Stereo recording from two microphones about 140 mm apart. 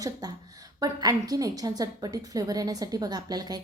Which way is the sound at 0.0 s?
30° right (ahead or behind).